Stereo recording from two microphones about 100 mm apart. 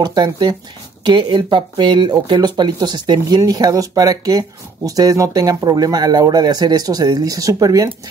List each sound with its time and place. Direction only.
0.0 s speech: 45° right (ahead or behind)